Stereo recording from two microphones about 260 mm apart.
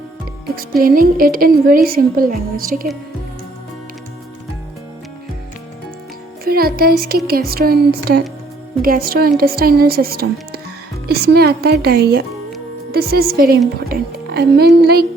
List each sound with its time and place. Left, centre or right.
0.8 s a woman's voice: right
6.4 s a woman's voice: right